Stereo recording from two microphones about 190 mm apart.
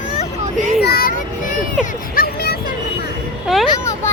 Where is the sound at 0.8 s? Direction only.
55° left (ahead or behind).